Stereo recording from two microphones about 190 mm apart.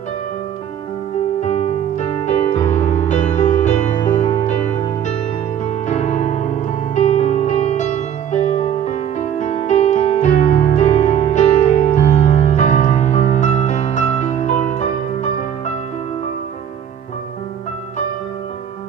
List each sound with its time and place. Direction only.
1.4 s music: 35° left (ahead or behind)